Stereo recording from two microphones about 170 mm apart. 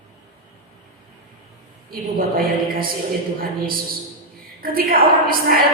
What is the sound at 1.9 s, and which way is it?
A woman's voice, 60° right (ahead or behind).